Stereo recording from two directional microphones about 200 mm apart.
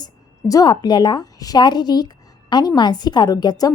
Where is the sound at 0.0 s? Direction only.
20° left (ahead or behind).